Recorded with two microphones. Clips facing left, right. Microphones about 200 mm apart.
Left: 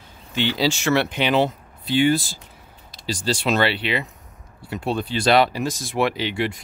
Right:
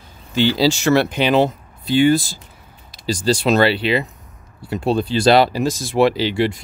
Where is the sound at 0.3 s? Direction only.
35° right (ahead or behind).